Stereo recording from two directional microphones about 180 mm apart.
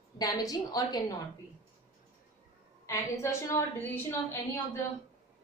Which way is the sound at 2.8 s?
15° left (ahead or behind).